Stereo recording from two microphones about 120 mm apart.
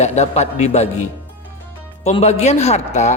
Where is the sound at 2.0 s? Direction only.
65° left (ahead or behind).